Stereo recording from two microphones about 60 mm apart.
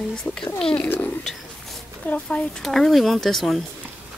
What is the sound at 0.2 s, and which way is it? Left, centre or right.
Speech, centre.